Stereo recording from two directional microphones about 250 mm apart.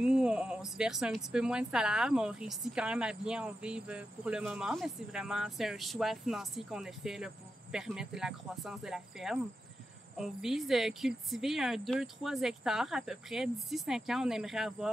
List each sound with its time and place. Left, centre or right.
0.0 s speech: centre